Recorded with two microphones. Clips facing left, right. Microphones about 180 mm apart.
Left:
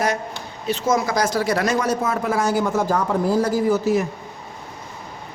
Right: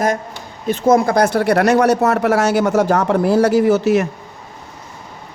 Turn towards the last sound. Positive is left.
turn(degrees=-75)  # may be behind; listen again after turning